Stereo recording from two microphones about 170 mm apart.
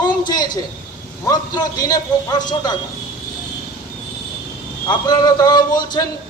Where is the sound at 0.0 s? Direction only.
25° left (ahead or behind).